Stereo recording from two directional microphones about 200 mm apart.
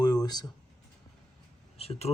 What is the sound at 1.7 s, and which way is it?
Speech, 30° left (ahead or behind).